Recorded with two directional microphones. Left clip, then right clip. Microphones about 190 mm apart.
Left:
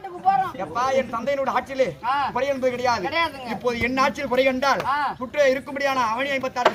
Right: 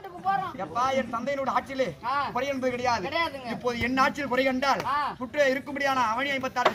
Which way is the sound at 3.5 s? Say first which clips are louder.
Left 4 dB; 5° left (ahead or behind).